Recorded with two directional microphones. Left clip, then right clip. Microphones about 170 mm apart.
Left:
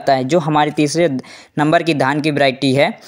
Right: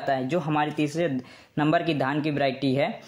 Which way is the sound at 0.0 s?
45° left (ahead or behind).